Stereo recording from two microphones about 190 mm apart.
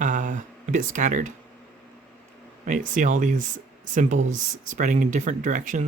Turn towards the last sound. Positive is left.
turn(degrees=-40)  # may be behind; listen again after turning